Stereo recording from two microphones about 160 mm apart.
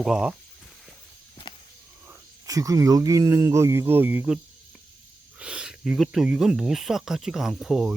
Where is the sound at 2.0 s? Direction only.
20° right (ahead or behind).